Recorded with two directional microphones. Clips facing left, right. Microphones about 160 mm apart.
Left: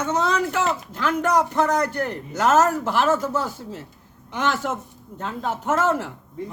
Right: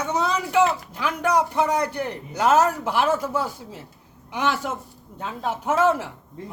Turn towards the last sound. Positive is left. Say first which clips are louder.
# right 1 dB
turn(degrees=-10)  # may be behind; listen again after turning